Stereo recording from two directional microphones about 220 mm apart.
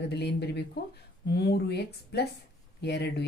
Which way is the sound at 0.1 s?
50° left (ahead or behind).